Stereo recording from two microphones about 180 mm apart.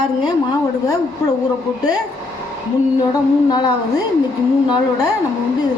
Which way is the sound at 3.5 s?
20° left (ahead or behind).